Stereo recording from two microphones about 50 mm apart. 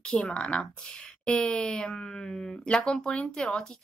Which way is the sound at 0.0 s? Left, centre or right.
Centre.